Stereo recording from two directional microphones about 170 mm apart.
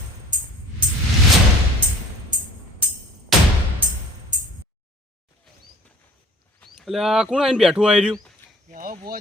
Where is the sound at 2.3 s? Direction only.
50° right (ahead or behind).